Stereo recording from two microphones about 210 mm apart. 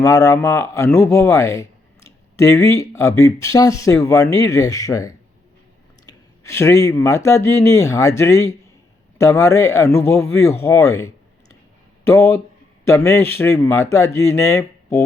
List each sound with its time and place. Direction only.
0.0 s speech: 15° left (ahead or behind)